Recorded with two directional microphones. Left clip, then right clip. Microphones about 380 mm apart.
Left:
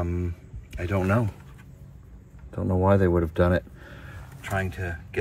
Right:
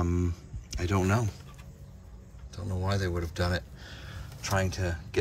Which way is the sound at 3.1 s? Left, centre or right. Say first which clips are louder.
Left 9 dB; centre.